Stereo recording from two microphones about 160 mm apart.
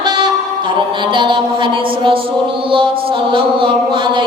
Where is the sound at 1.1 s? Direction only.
30° right (ahead or behind).